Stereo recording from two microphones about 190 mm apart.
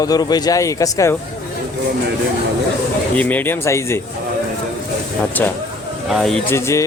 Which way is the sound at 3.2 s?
10° left (ahead or behind).